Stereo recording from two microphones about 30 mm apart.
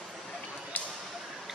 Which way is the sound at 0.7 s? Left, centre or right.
Left.